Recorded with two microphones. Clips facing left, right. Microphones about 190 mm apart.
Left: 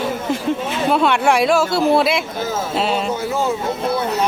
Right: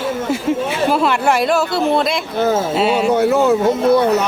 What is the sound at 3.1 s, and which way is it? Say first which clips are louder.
Speech: right 8 dB; 65° right (ahead or behind).